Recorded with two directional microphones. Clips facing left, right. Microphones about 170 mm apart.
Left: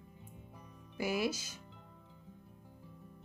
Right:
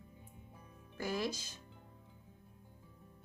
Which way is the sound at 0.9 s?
10° left (ahead or behind).